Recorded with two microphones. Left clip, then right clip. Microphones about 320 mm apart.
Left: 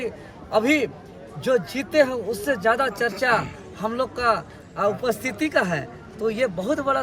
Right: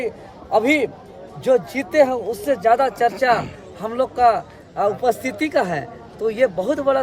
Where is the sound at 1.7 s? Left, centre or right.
Centre.